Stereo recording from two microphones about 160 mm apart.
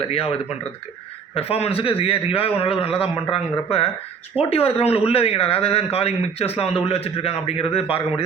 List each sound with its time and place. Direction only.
0.0 s speech: 35° left (ahead or behind)
1.4 s speech: 40° left (ahead or behind)